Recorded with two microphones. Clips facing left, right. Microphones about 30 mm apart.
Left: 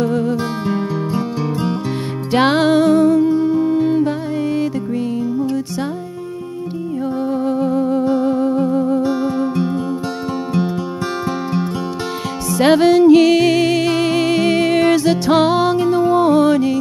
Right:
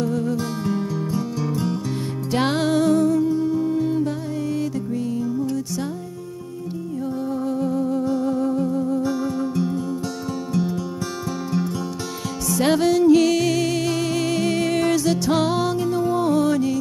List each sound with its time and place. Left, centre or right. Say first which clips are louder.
0.0 s music: left 5 dB; left
7.2 s music: left 6 dB; left
12.4 s music: left 7 dB; left